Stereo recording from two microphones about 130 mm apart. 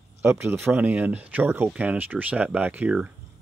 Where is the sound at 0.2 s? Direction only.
20° right (ahead or behind).